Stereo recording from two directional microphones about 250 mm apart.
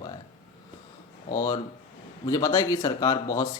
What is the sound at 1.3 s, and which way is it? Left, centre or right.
Speech, centre.